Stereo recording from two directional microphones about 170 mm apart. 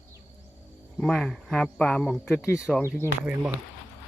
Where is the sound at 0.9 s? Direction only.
Centre (ahead or behind).